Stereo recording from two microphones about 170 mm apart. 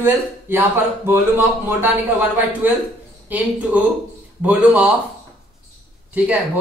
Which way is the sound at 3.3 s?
10° right (ahead or behind).